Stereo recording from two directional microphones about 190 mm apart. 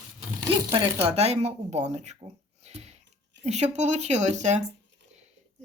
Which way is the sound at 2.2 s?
35° right (ahead or behind).